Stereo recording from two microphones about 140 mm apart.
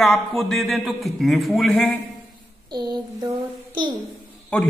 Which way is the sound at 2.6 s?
30° right (ahead or behind).